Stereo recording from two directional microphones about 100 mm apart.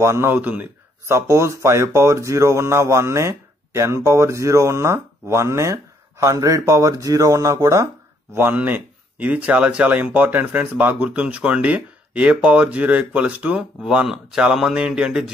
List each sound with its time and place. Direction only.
0.0 s speech: 25° right (ahead or behind)
8.4 s speech: 20° right (ahead or behind)